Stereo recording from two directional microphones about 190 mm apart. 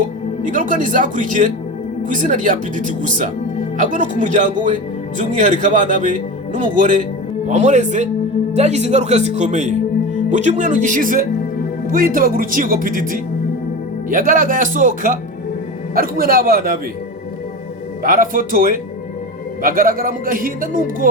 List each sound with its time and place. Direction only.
0.4 s speech: 45° right (ahead or behind)
18.0 s speech: 45° right (ahead or behind)